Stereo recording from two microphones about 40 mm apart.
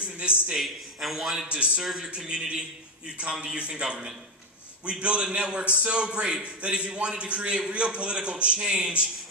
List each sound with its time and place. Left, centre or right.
0.0 s a man's voice: right
0.6 s a man's voice: centre
2.0 s a man's voice: right